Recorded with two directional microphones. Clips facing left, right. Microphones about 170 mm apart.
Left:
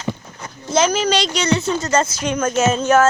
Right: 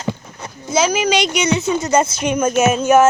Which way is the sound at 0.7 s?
10° right (ahead or behind).